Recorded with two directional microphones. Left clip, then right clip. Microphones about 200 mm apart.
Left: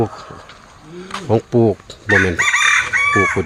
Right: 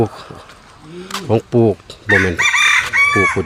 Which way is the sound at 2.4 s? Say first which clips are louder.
Right 1 dB; 55° right (ahead or behind).